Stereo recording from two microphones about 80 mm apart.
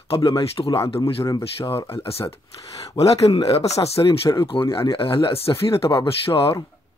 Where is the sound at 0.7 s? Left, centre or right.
Left.